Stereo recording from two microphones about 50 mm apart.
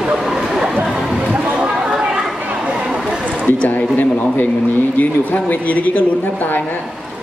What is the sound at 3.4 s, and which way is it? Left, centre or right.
Speech, left.